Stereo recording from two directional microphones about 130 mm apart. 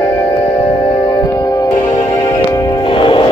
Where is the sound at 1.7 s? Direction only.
80° left.